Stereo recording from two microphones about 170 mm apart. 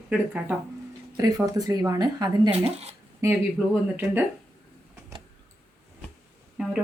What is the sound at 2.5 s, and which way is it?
Speech, 40° right (ahead or behind).